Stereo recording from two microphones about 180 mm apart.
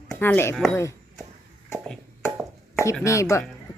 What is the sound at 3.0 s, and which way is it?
Speech, 15° left (ahead or behind).